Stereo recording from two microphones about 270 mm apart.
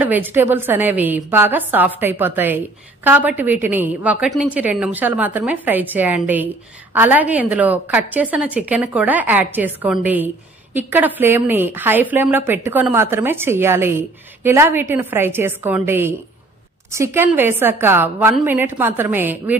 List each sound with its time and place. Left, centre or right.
0.0 s a woman's voice: centre